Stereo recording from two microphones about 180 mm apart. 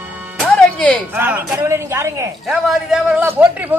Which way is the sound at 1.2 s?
10° right (ahead or behind).